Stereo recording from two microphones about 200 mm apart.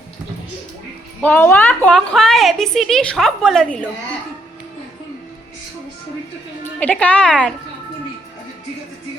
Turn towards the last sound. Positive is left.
turn(degrees=5)  # may be behind; listen again after turning